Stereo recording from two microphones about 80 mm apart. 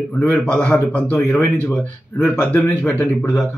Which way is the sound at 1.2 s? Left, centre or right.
Left.